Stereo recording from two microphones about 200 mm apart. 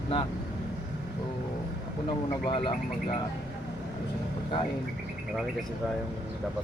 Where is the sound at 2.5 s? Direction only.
30° left (ahead or behind).